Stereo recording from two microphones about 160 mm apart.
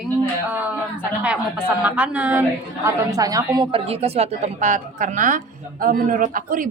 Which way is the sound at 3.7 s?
40° right (ahead or behind).